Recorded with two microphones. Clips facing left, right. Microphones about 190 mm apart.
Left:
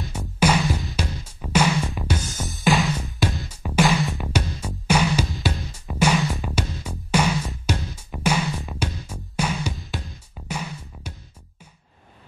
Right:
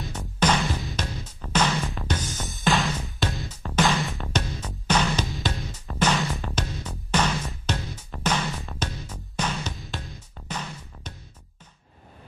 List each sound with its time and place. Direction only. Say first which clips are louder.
0.4 s music: left 3 dB; 10° left (ahead or behind)